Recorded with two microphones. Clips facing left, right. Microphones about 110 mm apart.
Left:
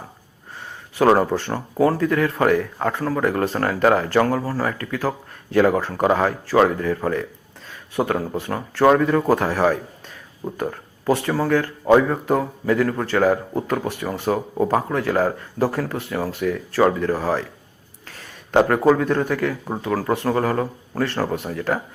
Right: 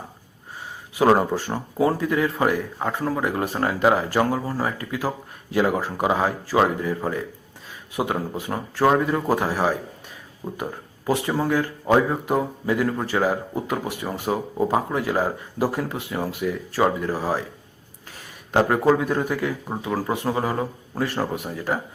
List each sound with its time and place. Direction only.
0.9 s speech: 10° right (ahead or behind)
18.9 s speech: 10° right (ahead or behind)